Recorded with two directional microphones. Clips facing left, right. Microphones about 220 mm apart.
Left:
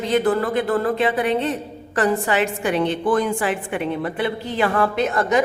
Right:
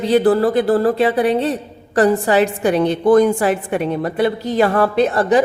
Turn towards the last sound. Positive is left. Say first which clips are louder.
# right 5 dB
turn(degrees=-35)  # may be behind; listen again after turning